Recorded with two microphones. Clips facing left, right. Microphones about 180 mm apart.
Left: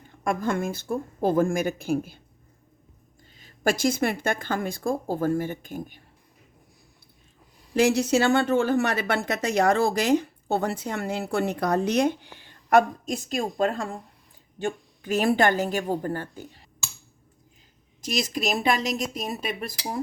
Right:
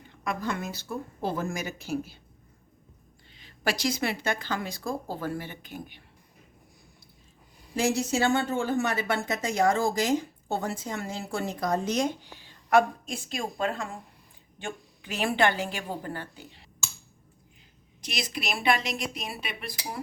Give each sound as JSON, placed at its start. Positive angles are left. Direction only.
{"t": 0.3, "sound": "speech", "side_deg": 50}
{"t": 3.3, "sound": "speech", "side_deg": 45}
{"t": 7.8, "sound": "speech", "side_deg": 70}
{"t": 18.0, "sound": "speech", "side_deg": 45}